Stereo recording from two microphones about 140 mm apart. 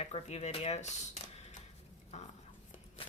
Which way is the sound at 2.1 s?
55° left (ahead or behind).